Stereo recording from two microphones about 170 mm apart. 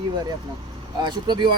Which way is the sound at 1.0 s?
25° right (ahead or behind).